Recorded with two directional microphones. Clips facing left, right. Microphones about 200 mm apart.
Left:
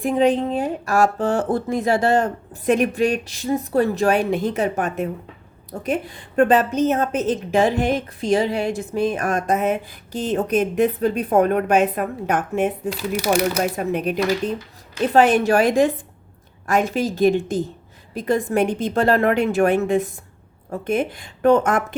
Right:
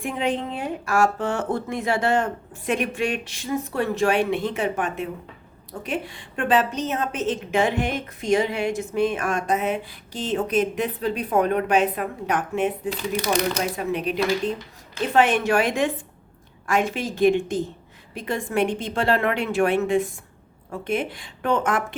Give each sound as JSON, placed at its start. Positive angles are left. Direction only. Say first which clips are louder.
{"t": 0.0, "sound": "a woman's voice", "louder": "left 8 dB", "side_deg": 35}
{"t": 13.0, "sound": "speech", "louder": "left 4 dB", "side_deg": 10}
{"t": 13.6, "sound": "a woman's voice", "louder": "left 4 dB", "side_deg": 50}
{"t": 15.1, "sound": "speech", "louder": "left 4 dB", "side_deg": 35}